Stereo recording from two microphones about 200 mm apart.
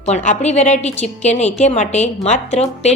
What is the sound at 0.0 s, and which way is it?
A woman's voice, 35° left (ahead or behind).